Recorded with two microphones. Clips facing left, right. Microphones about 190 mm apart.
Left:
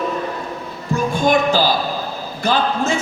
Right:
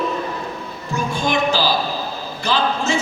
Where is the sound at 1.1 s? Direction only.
50° left (ahead or behind).